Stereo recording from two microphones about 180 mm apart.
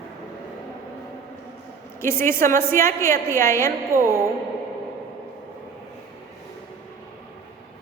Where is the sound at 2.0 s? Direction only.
15° left (ahead or behind).